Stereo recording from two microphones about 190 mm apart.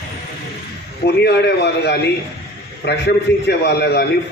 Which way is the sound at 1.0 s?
60° left (ahead or behind).